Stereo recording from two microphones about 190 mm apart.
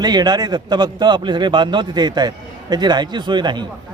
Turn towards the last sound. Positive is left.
turn(degrees=-25)  # may be behind; listen again after turning